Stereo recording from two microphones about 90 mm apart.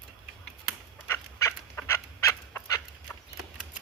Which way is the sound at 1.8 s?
30° left (ahead or behind).